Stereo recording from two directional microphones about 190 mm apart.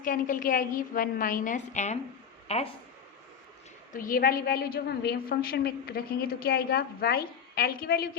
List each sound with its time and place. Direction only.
0.0 s a woman's voice: 45° left (ahead or behind)
3.9 s a woman's voice: 45° left (ahead or behind)